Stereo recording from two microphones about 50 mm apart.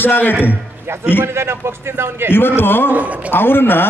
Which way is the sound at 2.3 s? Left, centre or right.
Left.